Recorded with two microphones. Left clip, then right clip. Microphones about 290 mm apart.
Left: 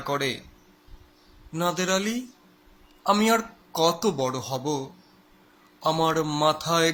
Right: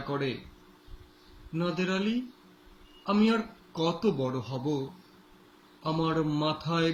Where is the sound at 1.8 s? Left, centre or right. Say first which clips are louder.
Left 5 dB; centre.